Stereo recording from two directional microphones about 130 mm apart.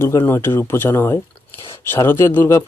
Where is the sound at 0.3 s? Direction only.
20° left (ahead or behind).